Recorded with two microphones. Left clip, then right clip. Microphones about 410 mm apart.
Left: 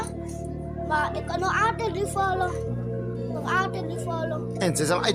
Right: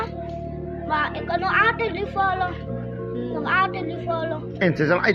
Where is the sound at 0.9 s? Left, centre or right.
Left.